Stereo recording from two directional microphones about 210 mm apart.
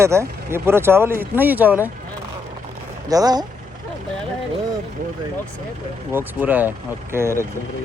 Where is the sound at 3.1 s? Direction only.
20° right (ahead or behind).